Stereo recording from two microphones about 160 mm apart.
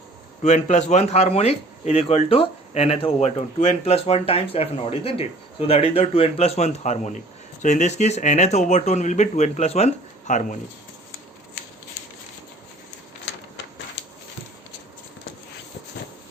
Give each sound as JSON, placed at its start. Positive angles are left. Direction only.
{"t": 0.4, "sound": "speech", "side_deg": 45}